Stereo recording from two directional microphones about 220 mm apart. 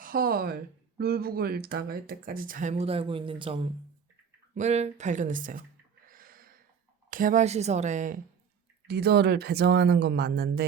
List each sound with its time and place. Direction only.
0.0 s speech: 40° right (ahead or behind)
6.1 s a sound: 40° right (ahead or behind)
7.1 s speech: 40° right (ahead or behind)
8.9 s speech: 45° right (ahead or behind)